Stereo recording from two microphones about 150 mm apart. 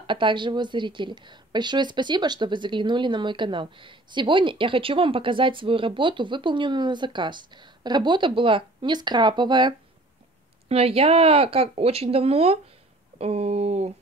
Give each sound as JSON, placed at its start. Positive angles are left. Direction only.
{"t": 0.0, "sound": "a woman's voice", "side_deg": -35}
{"t": 10.7, "sound": "a woman's voice", "side_deg": -40}